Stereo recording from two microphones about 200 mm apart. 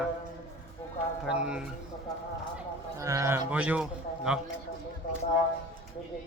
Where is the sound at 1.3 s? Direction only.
5° right (ahead or behind).